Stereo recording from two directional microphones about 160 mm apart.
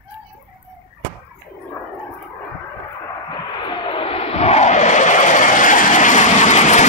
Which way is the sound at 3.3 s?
30° left (ahead or behind).